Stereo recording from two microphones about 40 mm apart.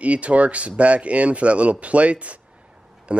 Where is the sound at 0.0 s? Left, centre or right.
Right.